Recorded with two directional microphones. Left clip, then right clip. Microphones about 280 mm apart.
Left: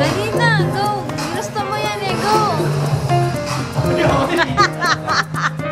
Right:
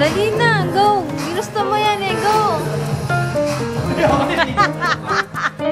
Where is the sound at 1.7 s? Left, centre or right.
Centre.